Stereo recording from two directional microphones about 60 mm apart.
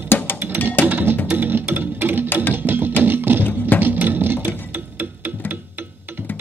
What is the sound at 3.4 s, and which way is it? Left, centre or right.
Music, left.